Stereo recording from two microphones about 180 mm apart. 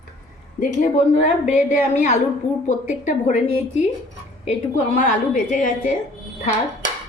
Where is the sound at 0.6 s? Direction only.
45° left (ahead or behind).